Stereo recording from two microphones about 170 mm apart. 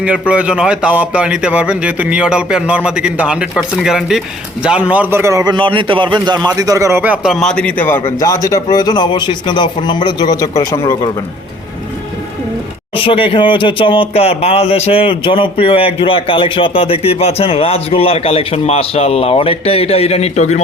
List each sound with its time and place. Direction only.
0.0 s a man's voice: 5° right (ahead or behind); by 11.1 s 20° left (ahead or behind)
13.0 s speech: 30° left (ahead or behind)